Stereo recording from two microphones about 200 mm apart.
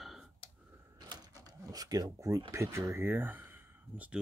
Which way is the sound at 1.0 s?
20° right (ahead or behind).